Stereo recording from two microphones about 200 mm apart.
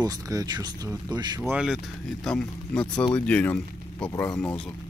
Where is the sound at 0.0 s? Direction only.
20° right (ahead or behind).